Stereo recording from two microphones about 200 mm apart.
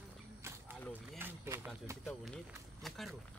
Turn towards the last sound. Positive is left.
turn(degrees=0)  # may be behind; listen again after turning